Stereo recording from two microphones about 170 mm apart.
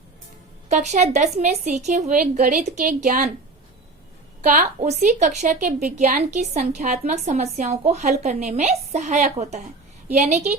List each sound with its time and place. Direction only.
0.7 s speech: 45° right (ahead or behind)
4.4 s speech: 45° right (ahead or behind)